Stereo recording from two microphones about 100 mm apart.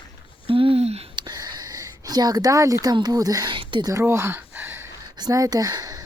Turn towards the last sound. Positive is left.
turn(degrees=-40)  # may be behind; listen again after turning